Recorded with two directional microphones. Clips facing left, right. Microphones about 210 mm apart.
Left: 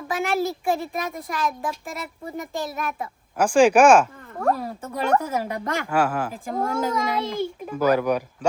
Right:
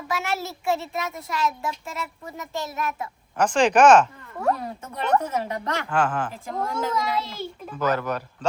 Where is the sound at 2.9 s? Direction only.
10° left (ahead or behind).